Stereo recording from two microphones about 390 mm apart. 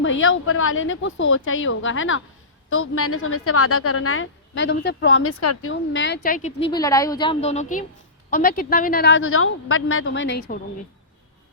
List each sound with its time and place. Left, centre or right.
0.0 s a woman's voice: left